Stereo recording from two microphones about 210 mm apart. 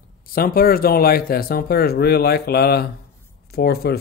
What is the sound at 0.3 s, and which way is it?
Speech, 45° left (ahead or behind).